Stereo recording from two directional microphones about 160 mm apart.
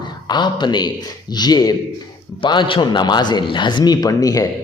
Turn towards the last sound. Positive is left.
turn(degrees=20)  # may be behind; listen again after turning